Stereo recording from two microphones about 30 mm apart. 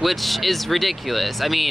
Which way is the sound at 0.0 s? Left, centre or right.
Centre.